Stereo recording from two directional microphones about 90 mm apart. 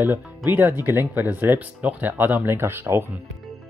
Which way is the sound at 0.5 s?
20° right (ahead or behind).